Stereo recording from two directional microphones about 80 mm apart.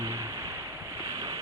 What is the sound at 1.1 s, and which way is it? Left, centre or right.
Boat, right.